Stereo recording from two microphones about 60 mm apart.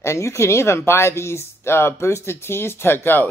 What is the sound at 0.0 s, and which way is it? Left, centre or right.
Speech, left.